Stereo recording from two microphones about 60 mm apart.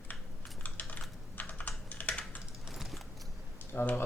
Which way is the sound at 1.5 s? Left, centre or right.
Left.